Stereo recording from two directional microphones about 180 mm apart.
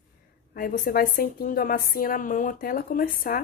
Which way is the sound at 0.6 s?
50° left (ahead or behind).